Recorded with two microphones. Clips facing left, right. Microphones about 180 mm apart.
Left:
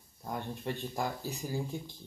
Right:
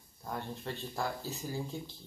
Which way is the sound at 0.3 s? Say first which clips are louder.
Left 2 dB; 15° left (ahead or behind).